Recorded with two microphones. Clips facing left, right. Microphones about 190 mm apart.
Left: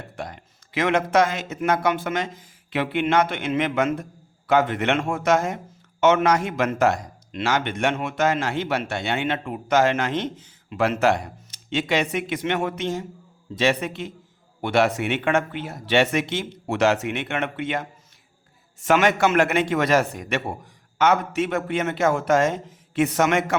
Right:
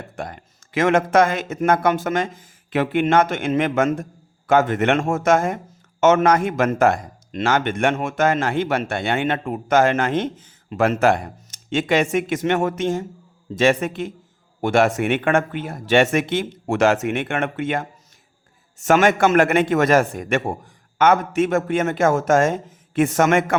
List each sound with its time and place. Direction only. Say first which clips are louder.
0.0 s a man's voice: right 3 dB; 50° right (ahead or behind)